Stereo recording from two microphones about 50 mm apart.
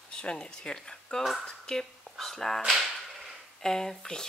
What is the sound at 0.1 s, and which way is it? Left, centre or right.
Speech, centre.